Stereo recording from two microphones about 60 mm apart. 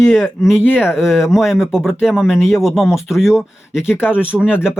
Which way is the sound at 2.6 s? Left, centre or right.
Centre.